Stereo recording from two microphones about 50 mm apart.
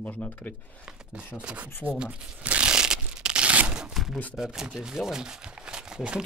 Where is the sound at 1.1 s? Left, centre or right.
Right.